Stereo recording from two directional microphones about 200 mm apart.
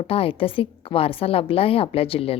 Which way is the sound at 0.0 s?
30° left (ahead or behind).